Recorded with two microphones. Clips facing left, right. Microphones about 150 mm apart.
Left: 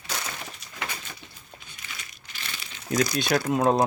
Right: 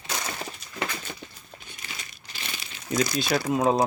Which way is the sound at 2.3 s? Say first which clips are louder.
Right 2 dB; 35° right (ahead or behind).